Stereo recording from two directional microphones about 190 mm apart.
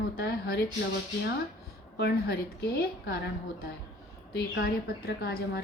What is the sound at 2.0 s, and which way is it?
A woman's voice, 60° left (ahead or behind).